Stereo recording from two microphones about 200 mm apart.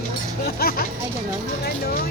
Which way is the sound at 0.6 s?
45° left (ahead or behind).